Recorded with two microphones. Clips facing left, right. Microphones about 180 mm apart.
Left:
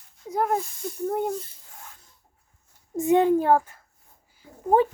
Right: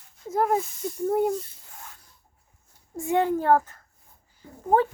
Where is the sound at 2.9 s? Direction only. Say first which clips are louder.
Left 5 dB; 20° left (ahead or behind).